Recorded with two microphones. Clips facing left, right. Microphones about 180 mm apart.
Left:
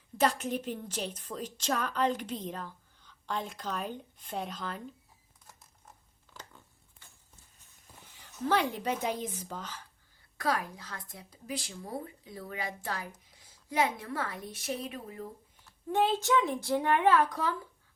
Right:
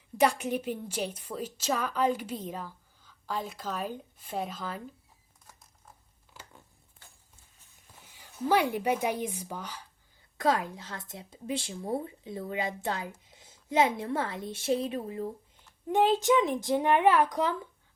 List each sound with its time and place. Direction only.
0.2 s a woman's voice: 10° right (ahead or behind)
8.1 s a woman's voice: 10° right (ahead or behind)
10.3 s a woman's voice: 25° right (ahead or behind)
15.6 s a woman's voice: 15° right (ahead or behind)